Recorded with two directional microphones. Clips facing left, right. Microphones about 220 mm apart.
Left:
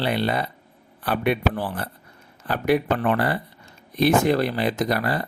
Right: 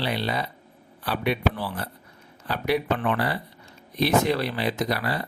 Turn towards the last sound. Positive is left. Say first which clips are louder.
# left 3 dB
turn(degrees=45)  # may be behind; listen again after turning